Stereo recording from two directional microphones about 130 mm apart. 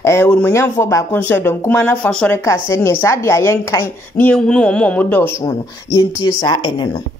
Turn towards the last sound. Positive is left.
turn(degrees=35)  # may be behind; listen again after turning